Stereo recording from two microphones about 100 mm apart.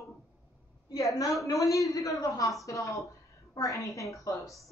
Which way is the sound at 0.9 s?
35° left (ahead or behind).